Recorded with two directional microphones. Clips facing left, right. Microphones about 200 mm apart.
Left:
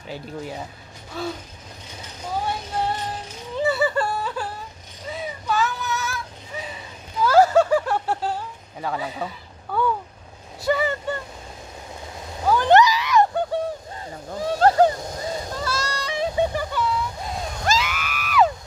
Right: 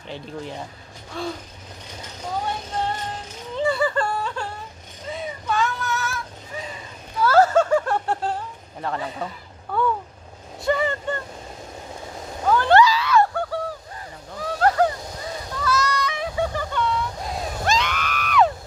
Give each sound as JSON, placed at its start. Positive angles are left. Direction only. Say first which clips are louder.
{"t": 0.1, "sound": "speech", "louder": "left 1 dB", "side_deg": 5}
{"t": 1.1, "sound": "mechanisms", "louder": "even", "side_deg": 5}
{"t": 3.6, "sound": "a sound", "louder": "even", "side_deg": 5}
{"t": 5.1, "sound": "child singing", "louder": "even", "side_deg": 5}
{"t": 7.2, "sound": "snicker", "louder": "left 1 dB", "side_deg": 15}
{"t": 10.6, "sound": "vehicle", "louder": "even", "side_deg": 5}
{"t": 12.4, "sound": "a sound", "louder": "even", "side_deg": 15}
{"t": 14.3, "sound": "splash", "louder": "left 3 dB", "side_deg": 25}
{"t": 16.7, "sound": "a sound", "louder": "even", "side_deg": 5}